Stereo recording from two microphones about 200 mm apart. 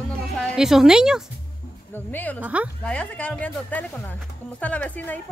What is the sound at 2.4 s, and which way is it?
Speech, 10° right (ahead or behind).